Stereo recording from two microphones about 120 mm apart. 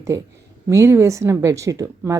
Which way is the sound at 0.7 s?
20° right (ahead or behind).